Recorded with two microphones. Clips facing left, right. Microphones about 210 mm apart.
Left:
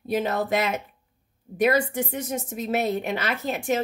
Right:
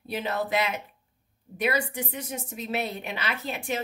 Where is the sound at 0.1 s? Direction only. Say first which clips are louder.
Left 4 dB; 45° left (ahead or behind).